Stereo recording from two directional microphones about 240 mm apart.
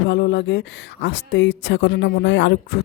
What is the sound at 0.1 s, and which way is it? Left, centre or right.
Speech, left.